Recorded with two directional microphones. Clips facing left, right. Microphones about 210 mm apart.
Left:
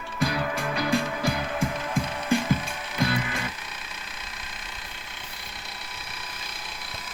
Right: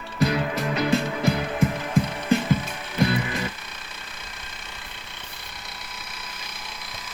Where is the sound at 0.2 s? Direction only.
20° right (ahead or behind).